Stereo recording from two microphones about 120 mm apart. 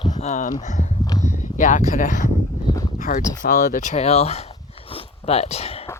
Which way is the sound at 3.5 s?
90° left.